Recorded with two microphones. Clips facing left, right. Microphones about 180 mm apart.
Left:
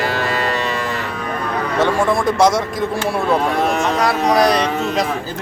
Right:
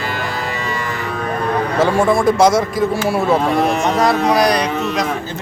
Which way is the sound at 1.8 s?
Centre (ahead or behind).